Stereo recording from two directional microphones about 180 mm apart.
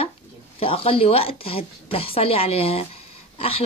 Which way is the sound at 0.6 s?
30° left (ahead or behind).